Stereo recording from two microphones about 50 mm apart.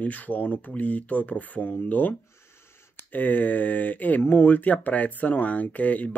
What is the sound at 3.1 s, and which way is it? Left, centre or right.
Speech, left.